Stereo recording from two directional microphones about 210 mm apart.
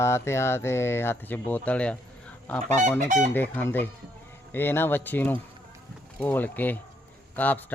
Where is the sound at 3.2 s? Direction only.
10° left (ahead or behind).